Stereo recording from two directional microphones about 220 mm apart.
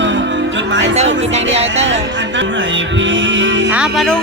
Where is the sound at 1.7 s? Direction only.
55° right (ahead or behind).